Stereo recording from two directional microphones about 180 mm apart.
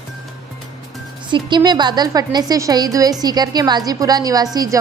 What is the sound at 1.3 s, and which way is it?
A woman's voice, 25° right (ahead or behind).